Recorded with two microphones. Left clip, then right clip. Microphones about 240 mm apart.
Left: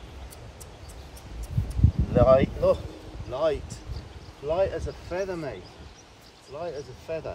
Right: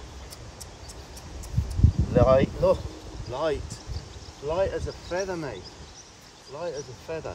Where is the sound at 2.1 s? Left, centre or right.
Centre.